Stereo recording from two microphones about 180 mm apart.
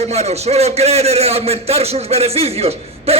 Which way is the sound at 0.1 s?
35° right (ahead or behind).